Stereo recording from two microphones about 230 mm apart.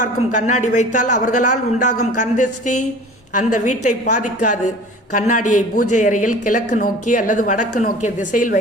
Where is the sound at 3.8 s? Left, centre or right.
Left.